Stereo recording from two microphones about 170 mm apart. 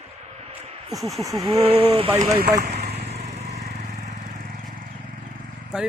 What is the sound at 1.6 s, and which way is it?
Speech, 35° right (ahead or behind).